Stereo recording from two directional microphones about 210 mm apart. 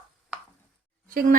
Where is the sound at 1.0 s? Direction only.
40° right (ahead or behind).